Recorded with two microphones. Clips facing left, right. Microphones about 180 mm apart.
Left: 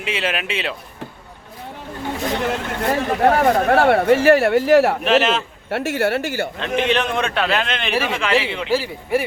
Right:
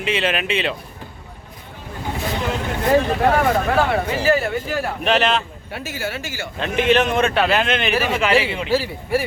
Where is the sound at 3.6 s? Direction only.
65° left (ahead or behind).